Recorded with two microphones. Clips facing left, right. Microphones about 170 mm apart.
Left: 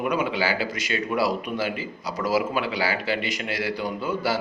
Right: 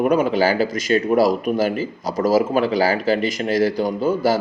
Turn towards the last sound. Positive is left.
turn(degrees=-40)  # may be behind; listen again after turning